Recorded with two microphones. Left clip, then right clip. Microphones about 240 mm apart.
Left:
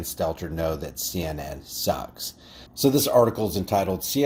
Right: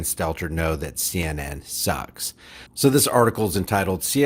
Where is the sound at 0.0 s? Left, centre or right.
Right.